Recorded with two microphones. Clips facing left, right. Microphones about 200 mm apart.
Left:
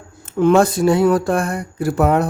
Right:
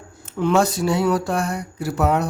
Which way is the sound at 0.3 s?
50° left (ahead or behind).